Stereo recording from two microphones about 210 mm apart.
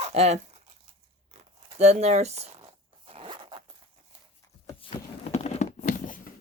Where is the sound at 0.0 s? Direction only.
30° right (ahead or behind).